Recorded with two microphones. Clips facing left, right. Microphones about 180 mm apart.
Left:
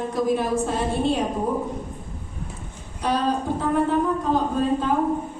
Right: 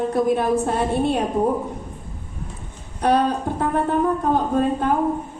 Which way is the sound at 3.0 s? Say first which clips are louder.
Right 4 dB; 60° right (ahead or behind).